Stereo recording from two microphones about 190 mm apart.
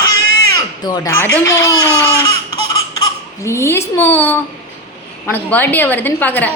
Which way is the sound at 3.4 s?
15° left (ahead or behind).